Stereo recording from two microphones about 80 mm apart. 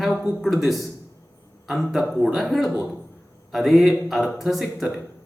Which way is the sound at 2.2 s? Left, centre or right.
Centre.